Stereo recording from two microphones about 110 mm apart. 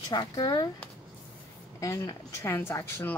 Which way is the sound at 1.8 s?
30° left (ahead or behind).